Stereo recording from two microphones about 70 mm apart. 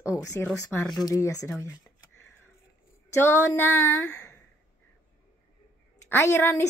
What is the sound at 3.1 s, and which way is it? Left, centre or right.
Speech, left.